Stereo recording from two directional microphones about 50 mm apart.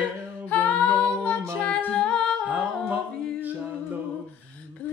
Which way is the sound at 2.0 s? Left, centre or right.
Centre.